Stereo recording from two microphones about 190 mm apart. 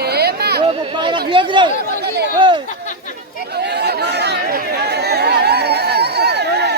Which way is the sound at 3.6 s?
60° right (ahead or behind).